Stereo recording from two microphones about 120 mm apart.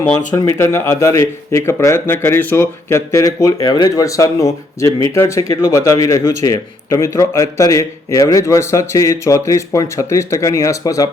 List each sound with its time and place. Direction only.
0.3 s speech: 25° left (ahead or behind)